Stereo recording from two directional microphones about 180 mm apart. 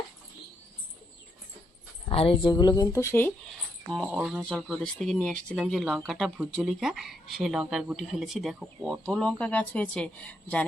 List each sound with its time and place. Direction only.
2.0 s a woman's voice: 30° left (ahead or behind); by 3.3 s 10° left (ahead or behind)
3.8 s speech: centre (ahead or behind)